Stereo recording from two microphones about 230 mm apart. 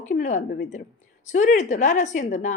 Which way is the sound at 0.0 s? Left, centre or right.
Left.